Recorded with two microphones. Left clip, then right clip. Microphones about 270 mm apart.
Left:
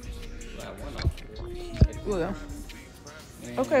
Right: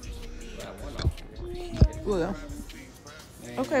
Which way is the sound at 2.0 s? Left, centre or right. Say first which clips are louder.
Right 1 dB; centre.